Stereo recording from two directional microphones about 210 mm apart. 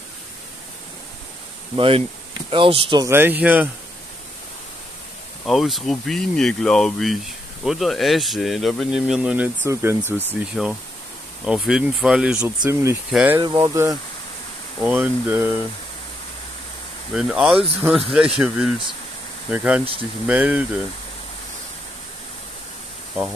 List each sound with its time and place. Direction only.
1.8 s speech: 25° right (ahead or behind)
3.1 s speech: 10° right (ahead or behind)
5.4 s speech: centre (ahead or behind)
17.1 s speech: centre (ahead or behind)
19.8 s speech: 25° right (ahead or behind)
20.2 s speech: 5° right (ahead or behind)